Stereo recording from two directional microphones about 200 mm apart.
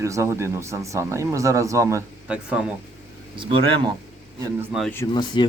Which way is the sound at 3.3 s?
25° right (ahead or behind).